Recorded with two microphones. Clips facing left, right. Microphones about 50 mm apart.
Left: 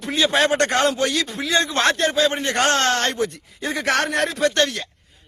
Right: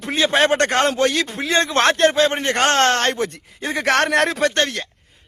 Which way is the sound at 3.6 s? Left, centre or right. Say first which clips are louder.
Right 3 dB; right.